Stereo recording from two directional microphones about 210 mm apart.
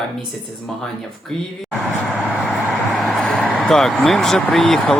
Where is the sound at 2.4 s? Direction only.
Centre (ahead or behind).